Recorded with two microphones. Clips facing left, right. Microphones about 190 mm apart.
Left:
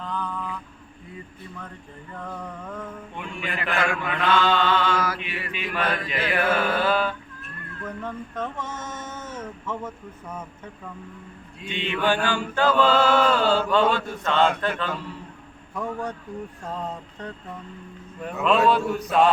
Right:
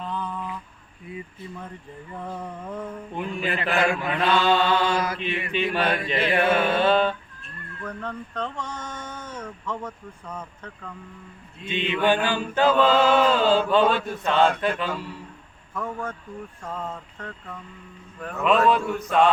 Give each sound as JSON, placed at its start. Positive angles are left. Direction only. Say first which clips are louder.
{"t": 0.0, "sound": "mantra", "louder": "even", "side_deg": -15}
{"t": 2.2, "sound": "chant", "louder": "right 1 dB", "side_deg": -15}
{"t": 3.2, "sound": "a man's voice", "louder": "right 5 dB", "side_deg": -35}
{"t": 4.3, "sound": "chant", "louder": "even", "side_deg": -15}
{"t": 4.9, "sound": "mantra", "louder": "right 1 dB", "side_deg": -25}
{"t": 7.9, "sound": "mantra", "louder": "even", "side_deg": 5}
{"t": 8.9, "sound": "speech", "louder": "left 1 dB", "side_deg": 5}
{"t": 11.7, "sound": "chant", "louder": "right 2 dB", "side_deg": -15}
{"t": 15.7, "sound": "a sound", "louder": "left 1 dB", "side_deg": 15}
{"t": 18.3, "sound": "mantra", "louder": "even", "side_deg": 0}